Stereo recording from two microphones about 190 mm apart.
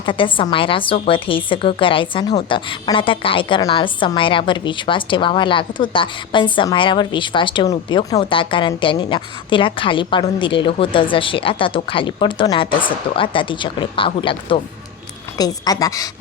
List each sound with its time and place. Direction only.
0.0 s a woman's voice: 25° left (ahead or behind)